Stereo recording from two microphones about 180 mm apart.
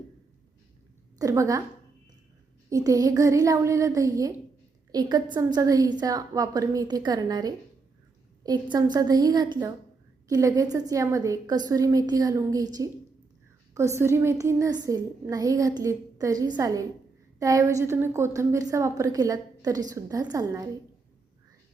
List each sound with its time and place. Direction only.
1.2 s a woman's voice: 20° right (ahead or behind)
2.6 s a woman's voice: 20° right (ahead or behind)
8.7 s a woman's voice: 25° right (ahead or behind)